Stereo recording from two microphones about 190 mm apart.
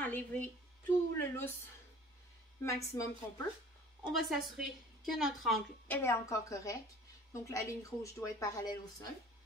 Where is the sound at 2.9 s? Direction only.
15° left (ahead or behind).